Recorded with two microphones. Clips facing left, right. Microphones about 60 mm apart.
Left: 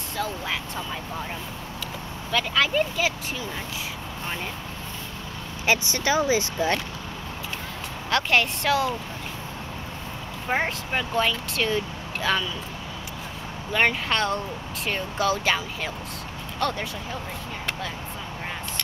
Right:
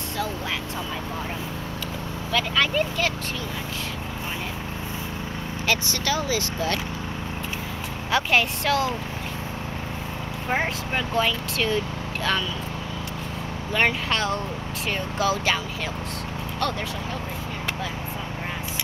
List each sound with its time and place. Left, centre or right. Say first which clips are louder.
2.3 s speech: even; centre
5.7 s speech: left 2 dB; left
8.1 s speech: even; centre
10.5 s speech: even; centre
13.7 s speech: even; centre